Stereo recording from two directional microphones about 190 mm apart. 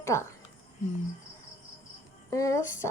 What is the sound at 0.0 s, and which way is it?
Speech, 15° left (ahead or behind).